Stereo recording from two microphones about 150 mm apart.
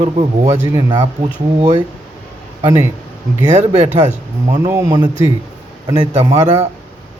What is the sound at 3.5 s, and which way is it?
Speech, 50° right (ahead or behind).